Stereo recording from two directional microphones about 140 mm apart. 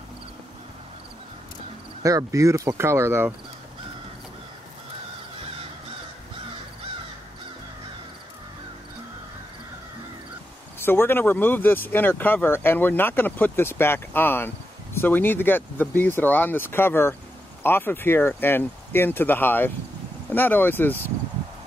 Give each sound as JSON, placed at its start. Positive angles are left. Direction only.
{"t": 2.0, "sound": "speech", "side_deg": -25}
{"t": 10.8, "sound": "speech", "side_deg": 15}